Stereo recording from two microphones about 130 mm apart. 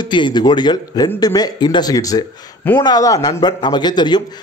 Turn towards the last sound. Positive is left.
turn(degrees=35)  # may be behind; listen again after turning